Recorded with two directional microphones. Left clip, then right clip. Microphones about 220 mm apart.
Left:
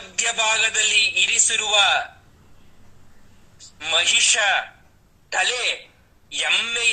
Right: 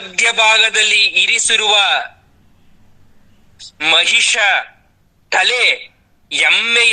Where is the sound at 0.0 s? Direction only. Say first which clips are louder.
Right 10 dB; 40° right (ahead or behind).